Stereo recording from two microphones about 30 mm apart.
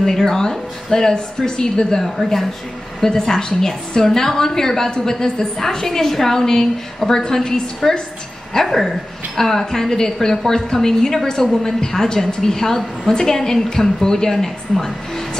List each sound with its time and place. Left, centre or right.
0.0 s a woman's voice: centre
2.2 s a woman's voice: centre